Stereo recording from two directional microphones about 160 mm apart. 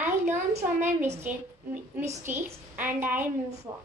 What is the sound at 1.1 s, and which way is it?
A child's voice, 15° right (ahead or behind).